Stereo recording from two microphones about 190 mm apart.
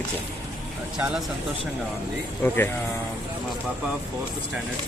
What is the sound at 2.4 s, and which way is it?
Speech, 10° left (ahead or behind).